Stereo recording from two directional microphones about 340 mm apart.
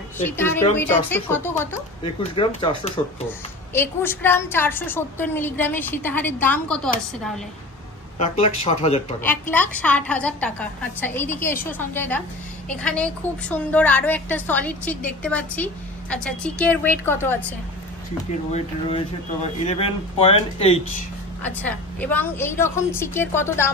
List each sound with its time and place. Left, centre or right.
0.2 s a woman's voice: centre
8.2 s a woman's voice: centre
9.2 s a woman's voice: centre
19.4 s a woman's voice: centre
21.4 s a woman's voice: centre